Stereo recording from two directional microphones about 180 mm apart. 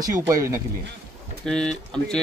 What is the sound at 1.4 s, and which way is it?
Speech, 5° left (ahead or behind).